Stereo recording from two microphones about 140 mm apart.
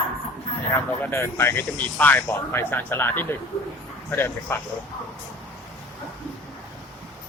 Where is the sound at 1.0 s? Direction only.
15° left (ahead or behind).